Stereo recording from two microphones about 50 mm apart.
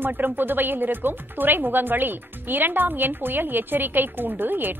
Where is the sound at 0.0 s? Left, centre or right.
Right.